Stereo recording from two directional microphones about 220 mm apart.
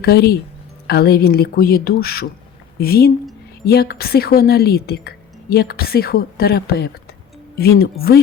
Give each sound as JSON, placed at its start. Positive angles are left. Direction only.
{"t": 0.0, "sound": "a woman's voice", "side_deg": 45}